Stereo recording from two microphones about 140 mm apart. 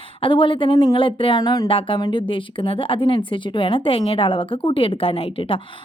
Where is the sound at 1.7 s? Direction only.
40° left (ahead or behind).